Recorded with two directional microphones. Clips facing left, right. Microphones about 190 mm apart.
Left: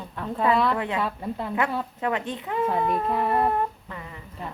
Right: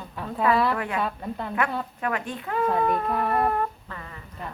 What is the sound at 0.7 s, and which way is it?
Speech, 20° left (ahead or behind).